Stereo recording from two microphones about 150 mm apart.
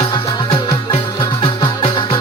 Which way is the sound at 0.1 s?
25° left (ahead or behind).